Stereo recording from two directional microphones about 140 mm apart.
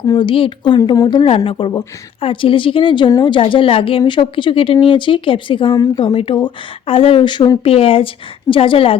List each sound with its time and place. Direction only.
0.1 s a woman's voice: 35° left (ahead or behind)
7.6 s a woman's voice: 40° left (ahead or behind)